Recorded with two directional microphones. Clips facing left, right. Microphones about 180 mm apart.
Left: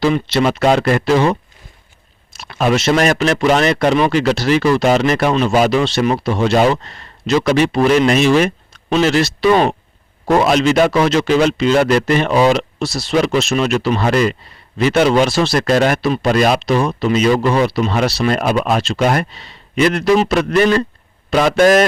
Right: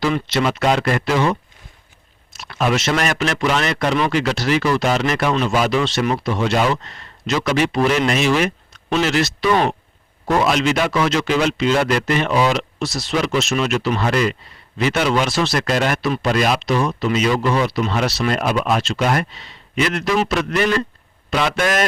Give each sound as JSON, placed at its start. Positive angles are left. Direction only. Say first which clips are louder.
{"t": 0.0, "sound": "speech", "louder": "left 4 dB", "side_deg": 30}
{"t": 2.6, "sound": "speech", "louder": "left 5 dB", "side_deg": 30}
{"t": 3.9, "sound": "speech", "louder": "left 5 dB", "side_deg": 30}